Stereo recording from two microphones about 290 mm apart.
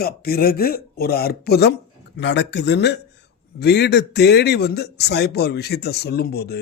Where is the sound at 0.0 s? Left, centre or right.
Left.